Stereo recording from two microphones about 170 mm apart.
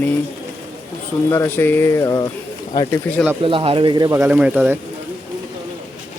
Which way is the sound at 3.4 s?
30° right (ahead or behind).